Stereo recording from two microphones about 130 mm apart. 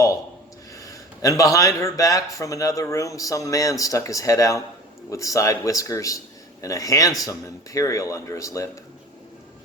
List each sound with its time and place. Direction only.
0.8 s speech: 25° left (ahead or behind)